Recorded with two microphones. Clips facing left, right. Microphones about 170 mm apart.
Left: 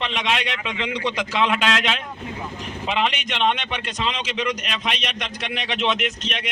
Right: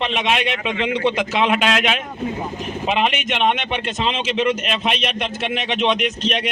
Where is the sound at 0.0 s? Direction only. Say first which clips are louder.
Right 4 dB; 20° right (ahead or behind).